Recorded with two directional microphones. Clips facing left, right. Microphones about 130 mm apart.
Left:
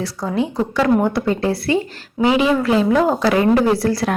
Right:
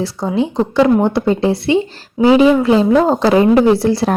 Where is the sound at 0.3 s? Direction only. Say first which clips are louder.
Right 5 dB; 30° right (ahead or behind).